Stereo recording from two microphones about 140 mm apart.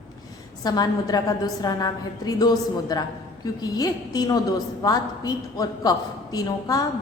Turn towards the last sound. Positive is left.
turn(degrees=25)  # may be behind; listen again after turning